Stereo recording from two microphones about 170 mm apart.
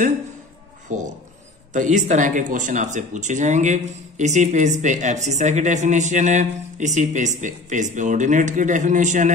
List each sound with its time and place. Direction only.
0.9 s speech: 50° right (ahead or behind)